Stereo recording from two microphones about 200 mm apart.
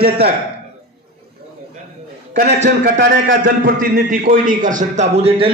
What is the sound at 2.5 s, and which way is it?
A man's voice, 40° right (ahead or behind).